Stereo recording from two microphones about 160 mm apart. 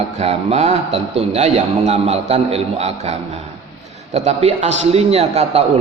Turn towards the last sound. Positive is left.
turn(degrees=-40)  # may be behind; listen again after turning